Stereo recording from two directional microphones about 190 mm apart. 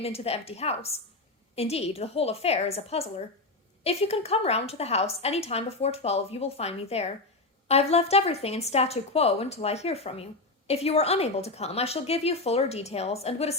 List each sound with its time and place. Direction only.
0.0 s a woman's voice: 30° left (ahead or behind)